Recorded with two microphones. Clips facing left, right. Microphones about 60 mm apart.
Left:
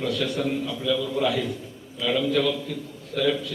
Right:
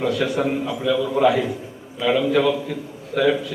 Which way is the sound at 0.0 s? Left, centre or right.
Right.